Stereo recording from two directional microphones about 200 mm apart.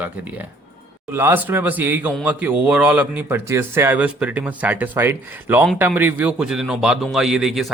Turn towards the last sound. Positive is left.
turn(degrees=0)  # may be behind; listen again after turning